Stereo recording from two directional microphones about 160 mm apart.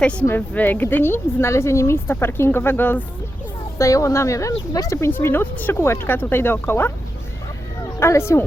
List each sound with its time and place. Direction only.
0.0 s speech: 5° left (ahead or behind)
7.9 s speech: 15° left (ahead or behind)